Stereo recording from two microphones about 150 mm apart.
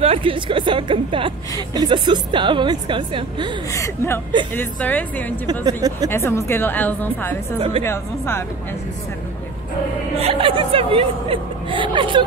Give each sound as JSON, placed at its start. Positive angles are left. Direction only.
{"t": 0.0, "sound": "speech", "side_deg": -40}
{"t": 3.7, "sound": "a woman's voice", "side_deg": 20}
{"t": 5.5, "sound": "speech", "side_deg": -25}
{"t": 6.0, "sound": "a woman's voice", "side_deg": 20}
{"t": 10.1, "sound": "speech", "side_deg": -40}